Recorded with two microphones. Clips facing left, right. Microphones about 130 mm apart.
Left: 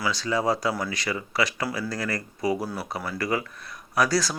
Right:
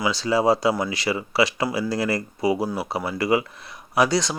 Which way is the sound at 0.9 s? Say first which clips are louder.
Right 5 dB; 30° right (ahead or behind).